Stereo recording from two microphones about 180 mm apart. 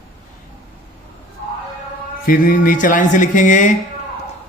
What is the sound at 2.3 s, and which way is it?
Speech, 50° left (ahead or behind).